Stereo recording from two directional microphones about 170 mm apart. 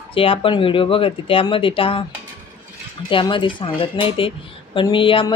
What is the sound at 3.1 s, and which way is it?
Speech, 30° left (ahead or behind).